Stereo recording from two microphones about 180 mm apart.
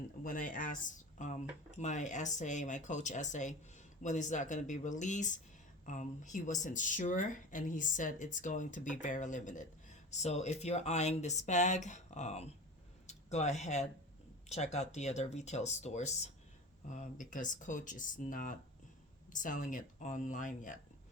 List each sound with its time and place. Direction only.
0.2 s speech: 45° left (ahead or behind)